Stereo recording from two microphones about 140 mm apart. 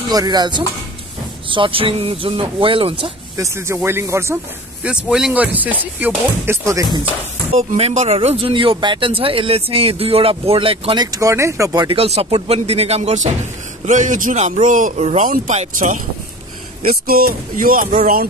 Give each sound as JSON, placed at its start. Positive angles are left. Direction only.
{"t": 0.1, "sound": "speech", "side_deg": -30}
{"t": 3.3, "sound": "speech", "side_deg": -20}
{"t": 4.8, "sound": "speech", "side_deg": -5}
{"t": 7.7, "sound": "speech", "side_deg": -50}
{"t": 11.1, "sound": "speech", "side_deg": -20}
{"t": 11.9, "sound": "speech", "side_deg": -45}
{"t": 13.8, "sound": "a man's voice", "side_deg": -65}
{"t": 15.0, "sound": "a man's voice", "side_deg": -55}
{"t": 16.8, "sound": "speech", "side_deg": -90}